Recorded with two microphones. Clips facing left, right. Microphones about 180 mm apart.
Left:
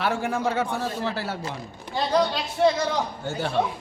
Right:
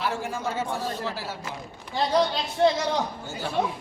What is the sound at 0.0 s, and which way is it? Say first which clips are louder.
A man's voice: left 4 dB; 60° left (ahead or behind).